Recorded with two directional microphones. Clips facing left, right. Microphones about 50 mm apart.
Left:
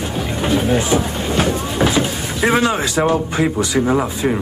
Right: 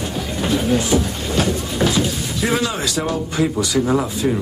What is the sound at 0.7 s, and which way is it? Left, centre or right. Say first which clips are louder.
Speech: left 1 dB; left.